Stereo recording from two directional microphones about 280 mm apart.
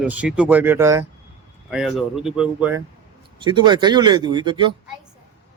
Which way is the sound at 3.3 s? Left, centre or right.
Centre.